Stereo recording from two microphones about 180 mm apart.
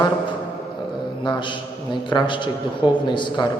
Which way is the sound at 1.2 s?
25° left (ahead or behind).